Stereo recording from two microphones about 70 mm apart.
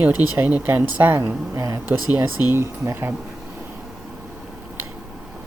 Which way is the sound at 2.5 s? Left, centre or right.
Right.